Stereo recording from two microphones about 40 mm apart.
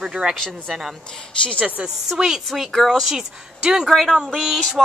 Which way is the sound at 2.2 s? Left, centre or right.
Centre.